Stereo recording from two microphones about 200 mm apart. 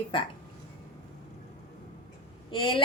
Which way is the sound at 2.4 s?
25° left (ahead or behind).